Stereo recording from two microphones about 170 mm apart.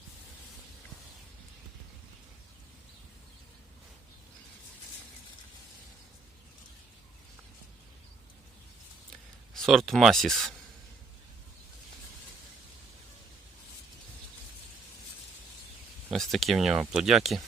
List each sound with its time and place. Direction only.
9.6 s speech: centre (ahead or behind)
16.0 s speech: centre (ahead or behind)